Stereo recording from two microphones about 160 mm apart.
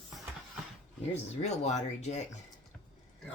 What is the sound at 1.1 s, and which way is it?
Speech, 45° left (ahead or behind).